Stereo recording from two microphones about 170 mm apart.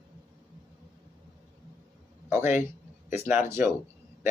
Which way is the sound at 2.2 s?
15° right (ahead or behind).